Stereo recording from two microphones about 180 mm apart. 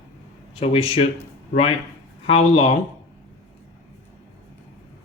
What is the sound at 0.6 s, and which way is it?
Speech, 35° left (ahead or behind).